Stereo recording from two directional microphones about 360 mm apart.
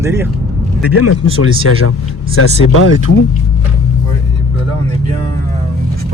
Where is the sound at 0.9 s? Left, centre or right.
Left.